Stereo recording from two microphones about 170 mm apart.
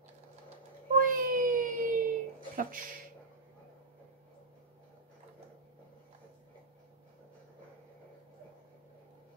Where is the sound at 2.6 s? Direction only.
55° right (ahead or behind).